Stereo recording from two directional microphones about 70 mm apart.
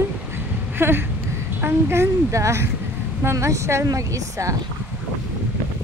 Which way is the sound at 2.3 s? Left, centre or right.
Right.